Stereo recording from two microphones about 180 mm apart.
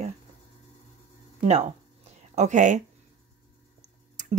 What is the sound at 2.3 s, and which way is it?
Speech, 45° right (ahead or behind).